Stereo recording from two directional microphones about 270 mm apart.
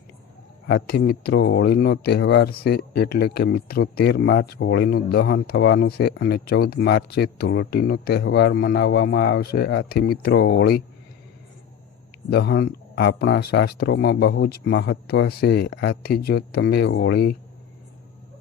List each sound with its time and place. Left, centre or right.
0.7 s speech: left
12.3 s speech: left